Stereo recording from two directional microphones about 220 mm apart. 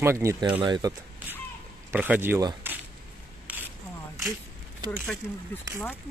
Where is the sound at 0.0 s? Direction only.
10° right (ahead or behind).